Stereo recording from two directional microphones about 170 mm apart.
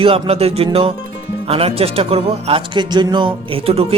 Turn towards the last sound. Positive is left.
turn(degrees=-35)  # may be behind; listen again after turning